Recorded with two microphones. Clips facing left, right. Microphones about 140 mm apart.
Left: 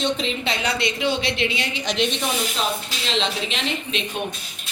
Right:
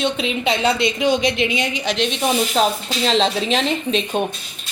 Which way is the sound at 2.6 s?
40° right (ahead or behind).